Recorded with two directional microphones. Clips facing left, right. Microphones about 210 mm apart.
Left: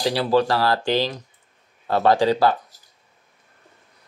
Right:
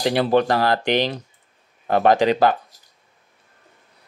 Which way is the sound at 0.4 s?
20° right (ahead or behind).